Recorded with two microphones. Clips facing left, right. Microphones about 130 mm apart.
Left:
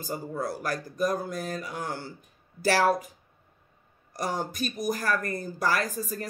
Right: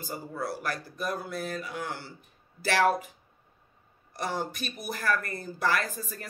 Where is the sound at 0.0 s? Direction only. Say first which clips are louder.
Left 3 dB; 45° left (ahead or behind).